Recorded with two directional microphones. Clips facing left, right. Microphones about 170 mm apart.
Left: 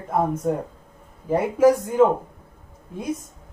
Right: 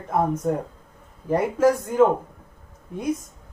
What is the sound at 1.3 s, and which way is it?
Speech, 15° left (ahead or behind).